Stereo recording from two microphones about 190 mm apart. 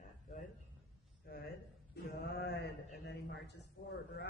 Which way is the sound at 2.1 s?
60° left (ahead or behind).